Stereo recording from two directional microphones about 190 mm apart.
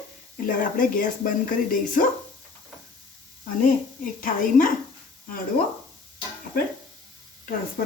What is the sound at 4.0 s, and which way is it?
Speech, 45° left (ahead or behind).